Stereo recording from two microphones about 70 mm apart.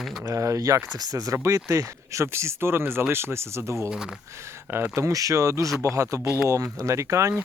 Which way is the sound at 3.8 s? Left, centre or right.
Centre.